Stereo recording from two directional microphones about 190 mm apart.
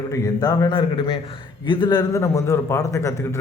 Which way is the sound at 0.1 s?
20° left (ahead or behind).